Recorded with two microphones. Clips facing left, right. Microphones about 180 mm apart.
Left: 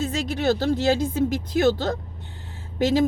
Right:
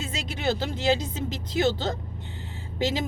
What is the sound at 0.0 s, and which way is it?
Speech, 45° left (ahead or behind).